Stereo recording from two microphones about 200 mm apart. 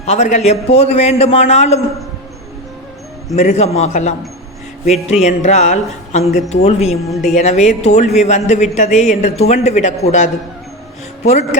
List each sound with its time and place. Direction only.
0.0 s a man's voice: 35° left (ahead or behind)
3.3 s a man's voice: 35° left (ahead or behind)
5.2 s a man's voice: 35° left (ahead or behind)
7.1 s a woman's voice: centre (ahead or behind)
7.3 s a man's voice: 35° left (ahead or behind)
11.3 s a man's voice: 35° left (ahead or behind)